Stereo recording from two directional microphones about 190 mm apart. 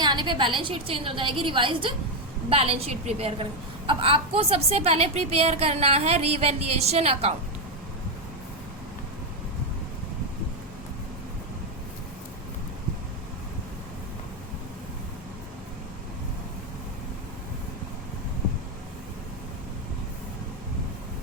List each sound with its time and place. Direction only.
0.0 s a woman's voice: 25° right (ahead or behind)